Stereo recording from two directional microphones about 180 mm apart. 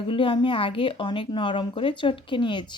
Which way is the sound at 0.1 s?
30° left (ahead or behind).